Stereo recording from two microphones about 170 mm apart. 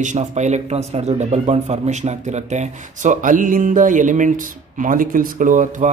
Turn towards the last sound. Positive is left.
turn(degrees=-50)  # may be behind; listen again after turning